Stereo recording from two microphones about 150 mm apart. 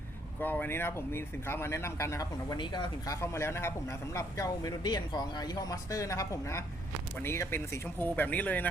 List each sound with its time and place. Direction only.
0.3 s speech: 10° left (ahead or behind)